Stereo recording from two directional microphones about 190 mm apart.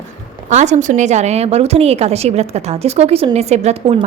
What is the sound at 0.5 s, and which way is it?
A woman's voice, 40° right (ahead or behind).